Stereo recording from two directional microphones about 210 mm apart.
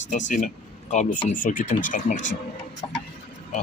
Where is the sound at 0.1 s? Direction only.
35° left (ahead or behind).